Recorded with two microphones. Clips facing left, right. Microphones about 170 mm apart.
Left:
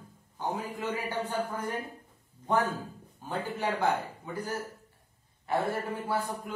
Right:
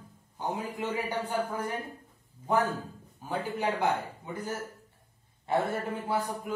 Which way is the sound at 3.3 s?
15° right (ahead or behind).